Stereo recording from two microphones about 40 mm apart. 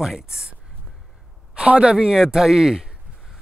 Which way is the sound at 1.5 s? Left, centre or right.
Right.